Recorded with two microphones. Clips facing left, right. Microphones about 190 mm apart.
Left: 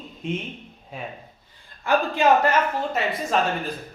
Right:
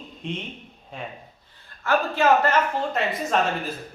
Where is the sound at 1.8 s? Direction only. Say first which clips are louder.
Left 1 dB; 15° left (ahead or behind).